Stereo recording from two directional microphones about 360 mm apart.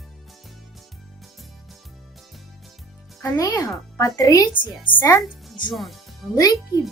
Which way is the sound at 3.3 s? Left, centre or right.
Centre.